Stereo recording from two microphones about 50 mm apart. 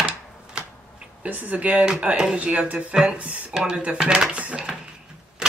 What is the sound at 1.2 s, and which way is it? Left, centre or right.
Speech, right.